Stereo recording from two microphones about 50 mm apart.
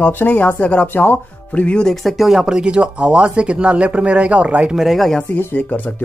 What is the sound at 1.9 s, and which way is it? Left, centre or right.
Speech, centre.